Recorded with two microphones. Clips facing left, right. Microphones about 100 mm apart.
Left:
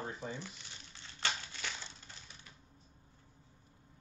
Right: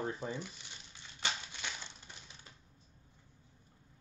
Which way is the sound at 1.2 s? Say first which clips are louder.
Left 1 dB; 15° right (ahead or behind).